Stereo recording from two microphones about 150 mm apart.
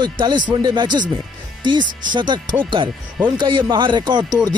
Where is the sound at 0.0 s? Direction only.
30° right (ahead or behind).